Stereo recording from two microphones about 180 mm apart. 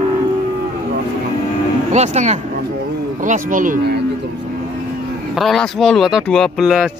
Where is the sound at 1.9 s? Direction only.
40° right (ahead or behind).